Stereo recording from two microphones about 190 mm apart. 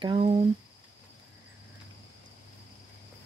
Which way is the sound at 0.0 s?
25° right (ahead or behind).